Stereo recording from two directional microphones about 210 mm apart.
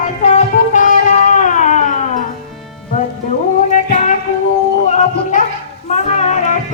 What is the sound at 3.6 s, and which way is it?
Music, 35° left (ahead or behind).